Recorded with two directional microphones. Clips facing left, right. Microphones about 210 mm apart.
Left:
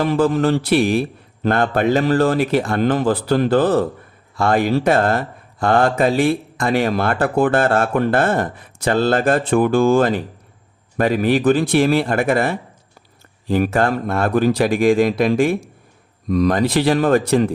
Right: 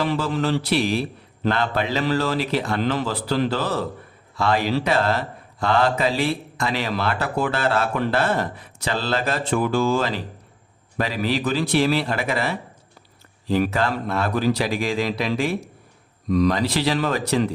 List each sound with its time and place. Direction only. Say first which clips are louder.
0.0 s speech: left 7 dB; 50° left (ahead or behind)